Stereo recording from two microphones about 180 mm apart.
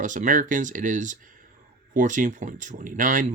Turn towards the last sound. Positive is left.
turn(degrees=-45)  # may be behind; listen again after turning